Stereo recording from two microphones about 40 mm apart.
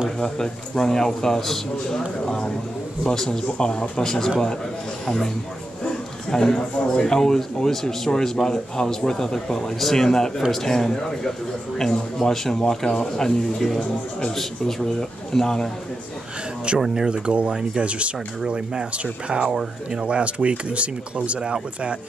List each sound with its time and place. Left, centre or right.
0.2 s a man's voice: centre
6.3 s speech: centre
16.7 s speech: right
19.2 s speech: right